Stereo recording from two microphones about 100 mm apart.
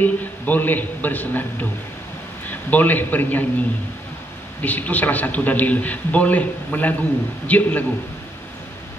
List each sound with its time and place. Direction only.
0.0 s a man's voice: 15° left (ahead or behind)